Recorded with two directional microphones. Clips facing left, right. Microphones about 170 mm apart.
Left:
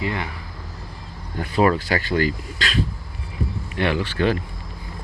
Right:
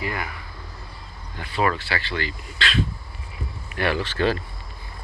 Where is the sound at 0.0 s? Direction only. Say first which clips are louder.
Left 3 dB; 25° left (ahead or behind).